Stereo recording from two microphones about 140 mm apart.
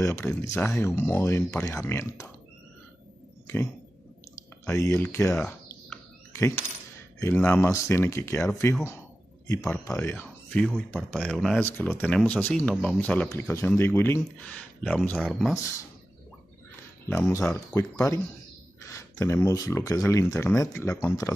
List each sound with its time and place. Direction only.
0.0 s speech: 15° left (ahead or behind)
4.6 s speech: 20° left (ahead or behind)
6.3 s coin: 20° left (ahead or behind)
7.3 s speech: 5° left (ahead or behind)
7.7 s speech: 15° left (ahead or behind); by 11.6 s centre (ahead or behind)
11.7 s speech: 15° left (ahead or behind)
14.4 s speech: 5° left (ahead or behind)
17.1 s speech: 15° left (ahead or behind)